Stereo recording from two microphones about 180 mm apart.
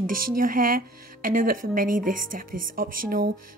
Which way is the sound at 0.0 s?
50° right (ahead or behind).